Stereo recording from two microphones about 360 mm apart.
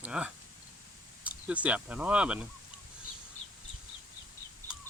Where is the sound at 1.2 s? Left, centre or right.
Centre.